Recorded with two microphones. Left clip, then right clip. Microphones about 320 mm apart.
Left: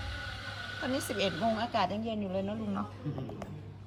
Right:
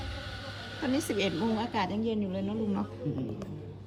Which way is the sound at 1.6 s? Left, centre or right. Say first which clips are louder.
Even; centre.